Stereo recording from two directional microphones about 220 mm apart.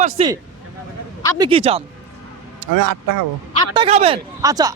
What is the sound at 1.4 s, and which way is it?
Speech, 25° right (ahead or behind).